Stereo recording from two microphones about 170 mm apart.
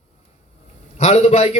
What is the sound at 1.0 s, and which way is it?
Speech, 40° left (ahead or behind).